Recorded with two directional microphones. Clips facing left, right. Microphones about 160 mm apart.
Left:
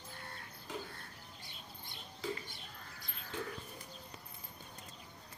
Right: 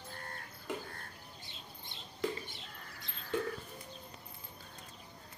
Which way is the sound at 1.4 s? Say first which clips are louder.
Right 1 dB; 25° right (ahead or behind).